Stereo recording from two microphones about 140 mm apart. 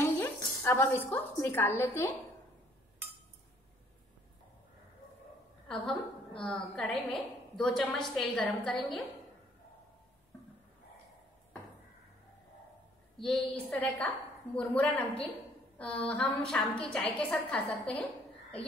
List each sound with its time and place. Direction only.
0.0 s a woman's voice: 20° left (ahead or behind)
5.7 s a woman's voice: 5° left (ahead or behind)
13.2 s a woman's voice: 5° left (ahead or behind)